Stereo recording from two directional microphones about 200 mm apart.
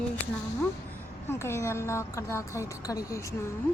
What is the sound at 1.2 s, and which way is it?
A woman's voice, 15° left (ahead or behind).